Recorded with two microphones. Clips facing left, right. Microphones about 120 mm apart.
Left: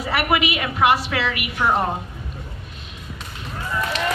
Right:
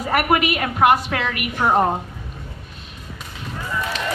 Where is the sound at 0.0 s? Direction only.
45° right (ahead or behind).